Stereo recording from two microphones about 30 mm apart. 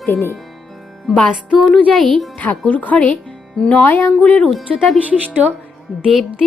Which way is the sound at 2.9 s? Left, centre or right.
Left.